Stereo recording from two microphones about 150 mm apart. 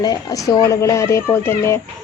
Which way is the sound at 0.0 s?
25° left (ahead or behind).